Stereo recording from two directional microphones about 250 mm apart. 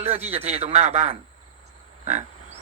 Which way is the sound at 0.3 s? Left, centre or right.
Right.